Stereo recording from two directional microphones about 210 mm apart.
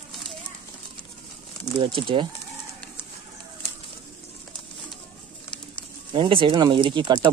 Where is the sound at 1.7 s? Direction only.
25° right (ahead or behind).